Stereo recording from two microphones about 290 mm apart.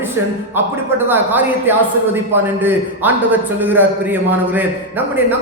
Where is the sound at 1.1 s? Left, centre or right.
Centre.